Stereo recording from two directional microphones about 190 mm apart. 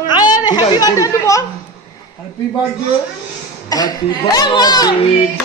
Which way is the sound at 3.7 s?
20° left (ahead or behind).